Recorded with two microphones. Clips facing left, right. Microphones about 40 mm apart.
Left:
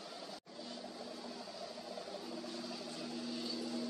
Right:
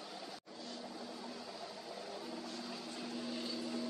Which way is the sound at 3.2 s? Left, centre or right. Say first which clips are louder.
Even; centre.